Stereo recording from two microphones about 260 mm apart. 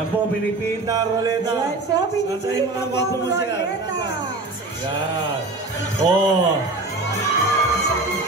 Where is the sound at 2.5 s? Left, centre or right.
Left.